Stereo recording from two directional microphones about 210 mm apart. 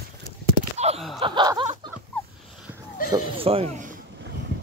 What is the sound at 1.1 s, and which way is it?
Snicker, 20° right (ahead or behind).